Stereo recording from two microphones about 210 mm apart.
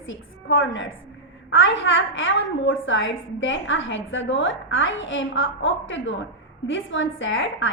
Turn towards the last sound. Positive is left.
turn(degrees=65)  # may be behind; listen again after turning